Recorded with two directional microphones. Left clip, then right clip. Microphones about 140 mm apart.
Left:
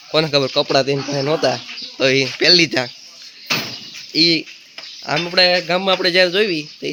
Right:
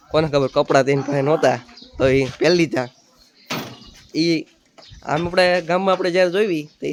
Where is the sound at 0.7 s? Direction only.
30° right (ahead or behind).